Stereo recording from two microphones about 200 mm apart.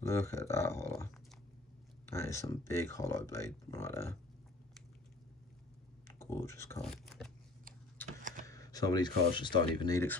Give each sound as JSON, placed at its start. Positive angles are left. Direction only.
{"t": 0.0, "sound": "speech", "side_deg": 15}
{"t": 6.1, "sound": "speech", "side_deg": 15}
{"t": 6.8, "sound": "speech", "side_deg": 5}
{"t": 8.2, "sound": "a sound", "side_deg": -40}
{"t": 8.5, "sound": "a sound", "side_deg": 15}
{"t": 9.3, "sound": "speech", "side_deg": 25}